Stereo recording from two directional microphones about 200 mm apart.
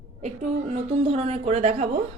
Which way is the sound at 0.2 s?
35° right (ahead or behind).